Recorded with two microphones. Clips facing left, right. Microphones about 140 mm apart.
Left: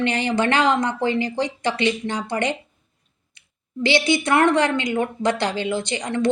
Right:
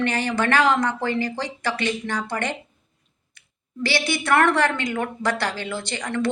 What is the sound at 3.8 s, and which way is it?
A woman's voice, 20° left (ahead or behind).